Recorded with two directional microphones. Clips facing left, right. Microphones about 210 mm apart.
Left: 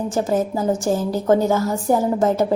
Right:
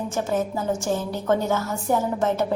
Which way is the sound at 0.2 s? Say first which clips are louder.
Left 5 dB; 35° left (ahead or behind).